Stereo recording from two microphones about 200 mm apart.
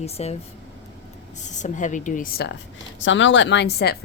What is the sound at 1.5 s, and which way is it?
A woman's voice, 40° left (ahead or behind).